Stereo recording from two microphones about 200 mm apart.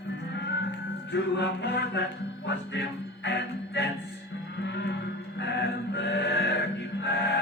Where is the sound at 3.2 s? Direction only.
60° left (ahead or behind).